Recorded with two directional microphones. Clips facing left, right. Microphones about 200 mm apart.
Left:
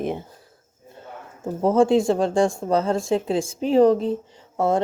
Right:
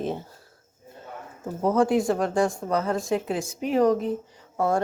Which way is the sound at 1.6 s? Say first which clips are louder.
Left 4 dB; 25° left (ahead or behind).